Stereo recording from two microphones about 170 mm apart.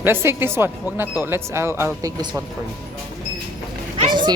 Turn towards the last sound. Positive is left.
turn(degrees=-30)  # may be behind; listen again after turning